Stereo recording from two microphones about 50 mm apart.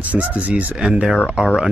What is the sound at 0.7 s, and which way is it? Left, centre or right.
Speech, centre.